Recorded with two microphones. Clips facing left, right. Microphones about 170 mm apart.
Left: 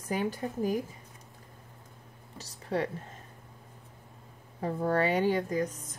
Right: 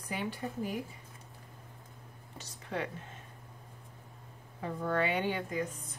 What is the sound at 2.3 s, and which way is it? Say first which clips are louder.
Speech: left 6 dB; 35° left (ahead or behind).